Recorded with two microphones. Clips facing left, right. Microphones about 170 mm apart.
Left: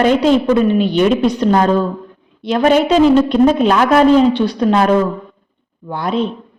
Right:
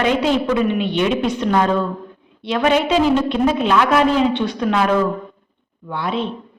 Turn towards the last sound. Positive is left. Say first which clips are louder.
# left 4 dB
turn(degrees=40)  # may be behind; listen again after turning